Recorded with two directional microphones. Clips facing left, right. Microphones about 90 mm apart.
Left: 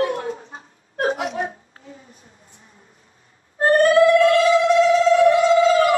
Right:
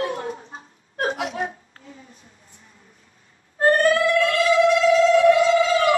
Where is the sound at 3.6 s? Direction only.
30° left (ahead or behind).